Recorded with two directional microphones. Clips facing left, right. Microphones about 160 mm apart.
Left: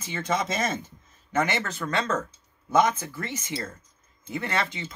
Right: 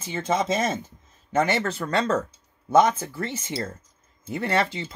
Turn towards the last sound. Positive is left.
turn(degrees=-35)  # may be behind; listen again after turning